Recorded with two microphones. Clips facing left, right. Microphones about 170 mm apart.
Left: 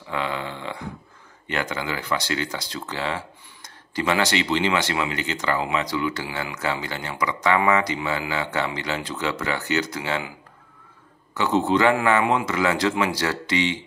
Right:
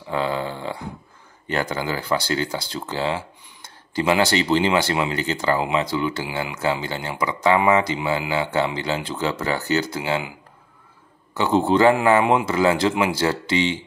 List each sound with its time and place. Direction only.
0.1 s a sound: 35° right (ahead or behind)
1.5 s speech: 35° right (ahead or behind)
11.3 s speech: 30° right (ahead or behind)